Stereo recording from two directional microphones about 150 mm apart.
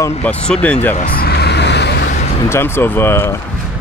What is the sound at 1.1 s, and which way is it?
Vehicle, 90° left.